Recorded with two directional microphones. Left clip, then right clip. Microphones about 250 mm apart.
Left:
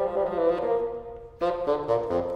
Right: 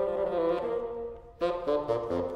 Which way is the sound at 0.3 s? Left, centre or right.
Right.